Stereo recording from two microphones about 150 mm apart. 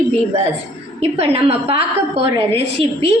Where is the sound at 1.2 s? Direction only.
40° right (ahead or behind).